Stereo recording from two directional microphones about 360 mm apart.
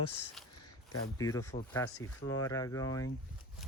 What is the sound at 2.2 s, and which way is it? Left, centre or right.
Speech, left.